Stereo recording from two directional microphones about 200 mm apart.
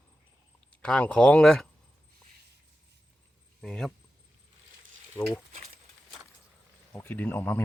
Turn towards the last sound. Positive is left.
turn(degrees=10)  # may be behind; listen again after turning